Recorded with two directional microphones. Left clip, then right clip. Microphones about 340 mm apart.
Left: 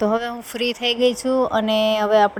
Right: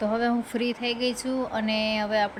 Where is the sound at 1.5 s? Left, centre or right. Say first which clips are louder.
Left 8 dB; centre.